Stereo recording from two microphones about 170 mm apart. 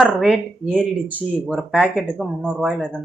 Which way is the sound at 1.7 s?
5° left (ahead or behind).